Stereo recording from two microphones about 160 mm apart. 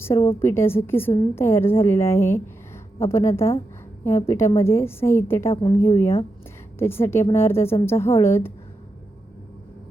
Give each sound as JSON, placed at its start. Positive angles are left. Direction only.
{"t": 0.0, "sound": "a woman's voice", "side_deg": 15}